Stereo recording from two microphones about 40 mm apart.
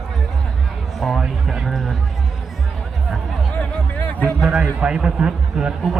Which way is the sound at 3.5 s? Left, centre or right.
Left.